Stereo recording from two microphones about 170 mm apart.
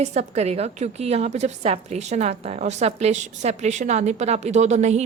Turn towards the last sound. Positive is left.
turn(degrees=-40)  # may be behind; listen again after turning